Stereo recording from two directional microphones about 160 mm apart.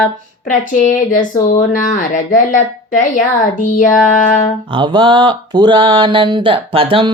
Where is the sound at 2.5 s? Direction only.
55° left (ahead or behind).